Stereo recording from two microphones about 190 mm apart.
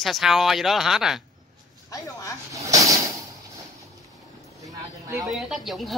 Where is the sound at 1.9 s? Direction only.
20° left (ahead or behind).